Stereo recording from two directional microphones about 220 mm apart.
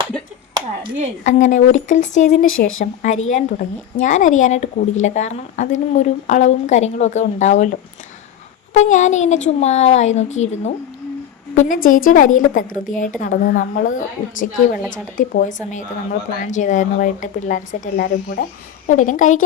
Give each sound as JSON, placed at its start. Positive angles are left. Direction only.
{"t": 0.5, "sound": "clapping", "side_deg": -20}
{"t": 1.2, "sound": "speech", "side_deg": 35}
{"t": 11.9, "sound": "speech", "side_deg": 40}